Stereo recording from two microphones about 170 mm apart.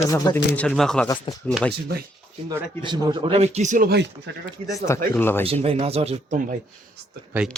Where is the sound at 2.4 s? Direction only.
25° right (ahead or behind); by 4.1 s 65° right (ahead or behind).